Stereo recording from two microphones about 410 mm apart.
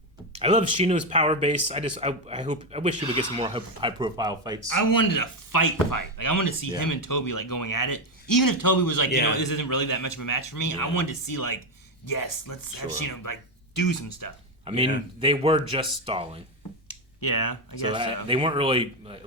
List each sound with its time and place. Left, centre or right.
0.3 s speech: centre
3.0 s speech: left
3.3 s speech: centre
4.7 s speech: left
14.6 s speech: centre
16.9 s a sound: left
17.8 s speech: centre